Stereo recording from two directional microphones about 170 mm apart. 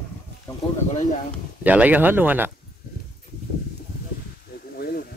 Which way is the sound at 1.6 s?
10° right (ahead or behind).